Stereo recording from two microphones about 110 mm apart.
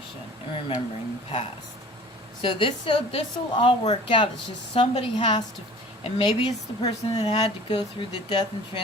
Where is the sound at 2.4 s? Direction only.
50° left (ahead or behind).